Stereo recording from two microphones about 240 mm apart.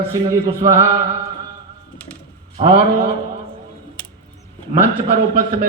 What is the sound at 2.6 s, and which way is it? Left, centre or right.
Mantra, right.